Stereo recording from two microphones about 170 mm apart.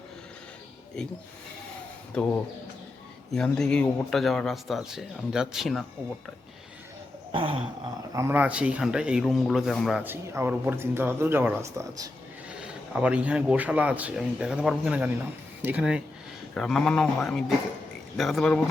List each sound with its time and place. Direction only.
2.1 s a man's voice: 5° left (ahead or behind)
7.3 s a sound: 30° right (ahead or behind)
8.1 s a man's voice: 15° right (ahead or behind); by 10.0 s centre (ahead or behind)
10.0 s a man's voice: 15° right (ahead or behind)
12.5 s a man's voice: 5° right (ahead or behind)